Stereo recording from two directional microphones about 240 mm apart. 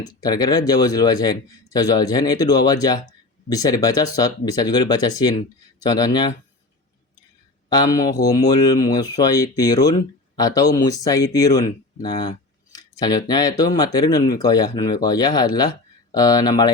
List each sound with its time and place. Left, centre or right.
0.0 s speech: centre
7.7 s speech: centre